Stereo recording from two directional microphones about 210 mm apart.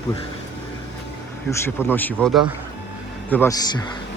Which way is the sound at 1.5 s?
10° left (ahead or behind).